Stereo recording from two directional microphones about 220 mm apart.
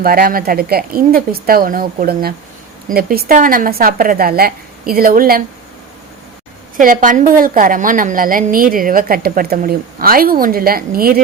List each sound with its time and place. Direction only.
0.0 s a woman's voice: 40° right (ahead or behind)
6.7 s a woman's voice: 35° right (ahead or behind)